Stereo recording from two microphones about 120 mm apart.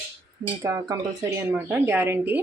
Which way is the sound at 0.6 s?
25° right (ahead or behind).